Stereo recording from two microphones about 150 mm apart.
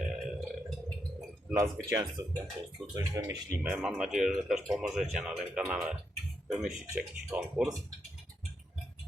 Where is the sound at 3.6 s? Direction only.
5° right (ahead or behind).